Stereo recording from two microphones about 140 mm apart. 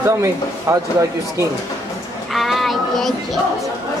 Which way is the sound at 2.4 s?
Centre (ahead or behind).